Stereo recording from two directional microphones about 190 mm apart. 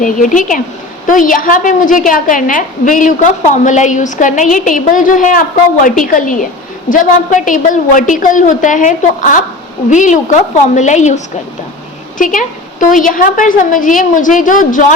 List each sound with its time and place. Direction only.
0.0 s a woman's voice: 45° left (ahead or behind)